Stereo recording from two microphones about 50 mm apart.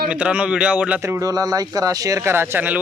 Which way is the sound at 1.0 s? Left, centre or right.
Right.